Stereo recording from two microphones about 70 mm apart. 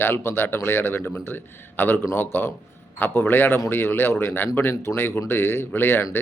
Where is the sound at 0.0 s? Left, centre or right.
Left.